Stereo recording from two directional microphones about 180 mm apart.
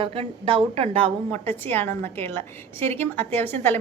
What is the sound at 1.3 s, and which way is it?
A woman's voice, 10° left (ahead or behind).